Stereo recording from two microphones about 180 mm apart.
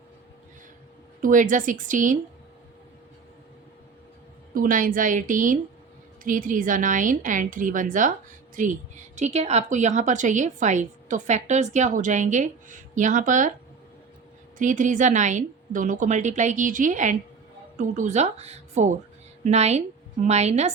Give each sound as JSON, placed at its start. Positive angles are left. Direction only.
{"t": 1.2, "sound": "a woman's voice", "side_deg": -45}
{"t": 4.5, "sound": "a woman's voice", "side_deg": -50}
{"t": 14.6, "sound": "a woman's voice", "side_deg": -45}